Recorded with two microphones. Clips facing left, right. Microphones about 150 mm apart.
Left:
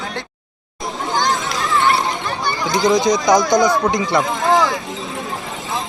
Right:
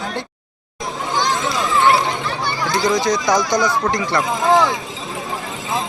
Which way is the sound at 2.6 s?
20° left (ahead or behind).